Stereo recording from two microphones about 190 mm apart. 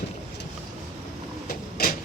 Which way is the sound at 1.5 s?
50° left (ahead or behind).